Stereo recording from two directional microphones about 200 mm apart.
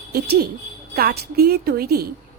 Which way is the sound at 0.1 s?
50° right (ahead or behind).